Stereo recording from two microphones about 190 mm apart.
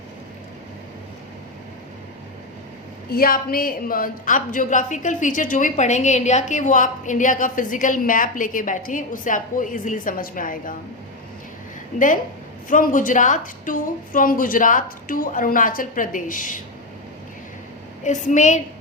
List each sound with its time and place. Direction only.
3.1 s a woman's voice: 50° left (ahead or behind)
11.9 s a woman's voice: 45° left (ahead or behind)
18.0 s a woman's voice: 40° left (ahead or behind)